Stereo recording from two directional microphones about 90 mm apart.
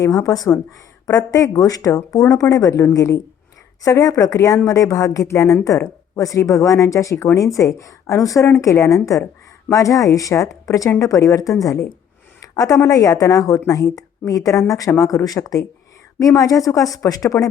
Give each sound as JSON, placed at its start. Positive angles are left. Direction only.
{"t": 0.0, "sound": "speech", "side_deg": 40}